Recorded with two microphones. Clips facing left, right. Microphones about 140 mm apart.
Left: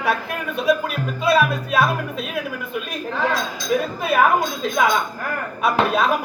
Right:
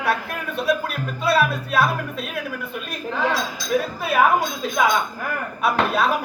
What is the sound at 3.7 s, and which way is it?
Speech, centre (ahead or behind).